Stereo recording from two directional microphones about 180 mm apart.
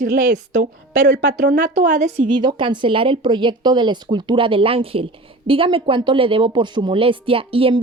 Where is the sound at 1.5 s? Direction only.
45° right (ahead or behind).